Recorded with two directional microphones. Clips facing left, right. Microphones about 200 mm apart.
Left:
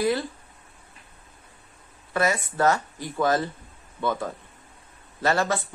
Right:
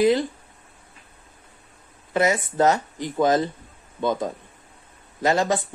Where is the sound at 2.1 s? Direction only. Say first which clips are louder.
Right 4 dB; 20° right (ahead or behind).